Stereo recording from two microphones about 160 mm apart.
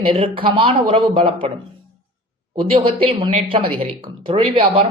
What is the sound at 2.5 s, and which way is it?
Speech, 35° right (ahead or behind).